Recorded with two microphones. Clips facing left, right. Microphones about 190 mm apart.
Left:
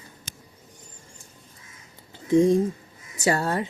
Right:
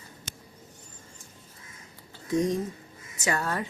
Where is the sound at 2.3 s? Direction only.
30° left (ahead or behind).